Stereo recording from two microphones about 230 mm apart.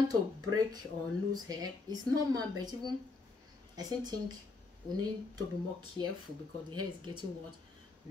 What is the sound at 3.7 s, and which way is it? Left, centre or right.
Speech, centre.